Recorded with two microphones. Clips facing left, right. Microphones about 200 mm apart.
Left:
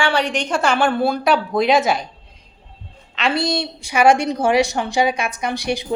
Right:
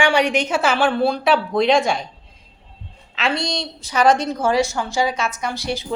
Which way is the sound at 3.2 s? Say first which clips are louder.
Left 3 dB; centre (ahead or behind).